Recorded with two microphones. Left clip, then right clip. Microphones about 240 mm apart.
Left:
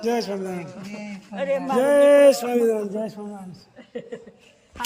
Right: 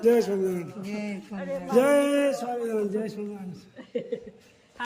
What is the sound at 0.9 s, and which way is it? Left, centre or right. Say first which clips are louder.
Speech: right 6 dB; centre.